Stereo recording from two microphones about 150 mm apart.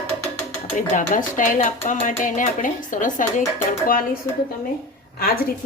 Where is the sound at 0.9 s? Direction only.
60° left (ahead or behind).